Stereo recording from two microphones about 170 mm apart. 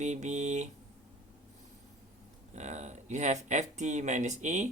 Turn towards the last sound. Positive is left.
turn(degrees=-45)  # may be behind; listen again after turning